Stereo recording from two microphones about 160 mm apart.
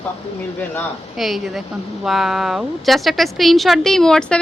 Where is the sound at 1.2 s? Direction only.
Centre (ahead or behind).